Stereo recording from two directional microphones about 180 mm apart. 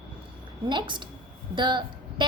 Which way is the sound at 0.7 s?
25° right (ahead or behind).